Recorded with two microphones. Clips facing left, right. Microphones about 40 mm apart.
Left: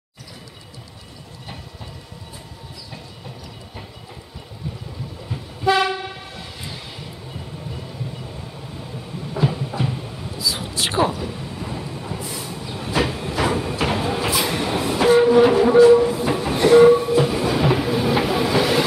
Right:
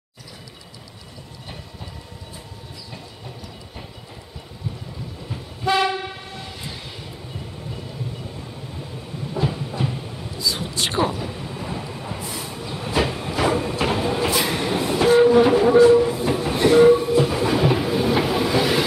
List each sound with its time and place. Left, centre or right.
5.3 s train: centre
9.3 s a sound: centre
17.3 s train: centre